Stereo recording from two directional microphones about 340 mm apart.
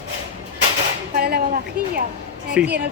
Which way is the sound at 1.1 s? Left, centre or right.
Right.